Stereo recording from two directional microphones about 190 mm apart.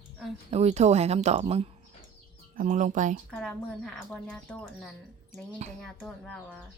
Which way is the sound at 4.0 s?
5° left (ahead or behind).